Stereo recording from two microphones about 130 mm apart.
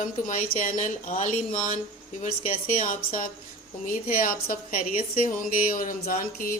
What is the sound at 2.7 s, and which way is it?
Speech, 90° left.